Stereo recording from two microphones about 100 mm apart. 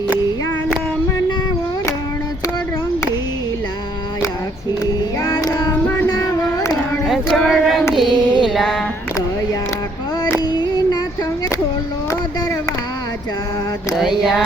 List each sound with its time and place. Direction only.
5.2 s child singing: 40° left (ahead or behind)
6.1 s a sound: 35° left (ahead or behind)
7.1 s child singing: centre (ahead or behind)
7.9 s music: 5° right (ahead or behind)
10.4 s music: 45° left (ahead or behind)
13.9 s mantra: centre (ahead or behind)